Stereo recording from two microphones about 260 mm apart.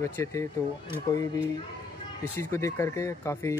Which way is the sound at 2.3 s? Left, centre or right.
Centre.